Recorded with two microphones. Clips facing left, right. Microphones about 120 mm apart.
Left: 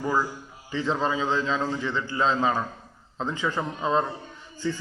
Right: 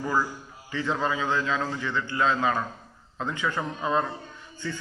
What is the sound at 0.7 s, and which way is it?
A man's voice, 25° left (ahead or behind).